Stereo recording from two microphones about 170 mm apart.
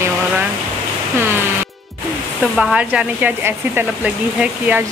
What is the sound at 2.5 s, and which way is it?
Speech, 5° right (ahead or behind).